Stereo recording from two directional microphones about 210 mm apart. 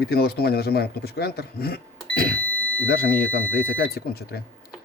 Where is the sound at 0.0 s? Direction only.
50° left (ahead or behind).